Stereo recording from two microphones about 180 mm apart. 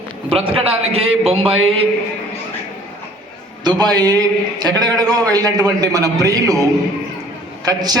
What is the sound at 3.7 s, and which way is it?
A man's voice, 20° right (ahead or behind).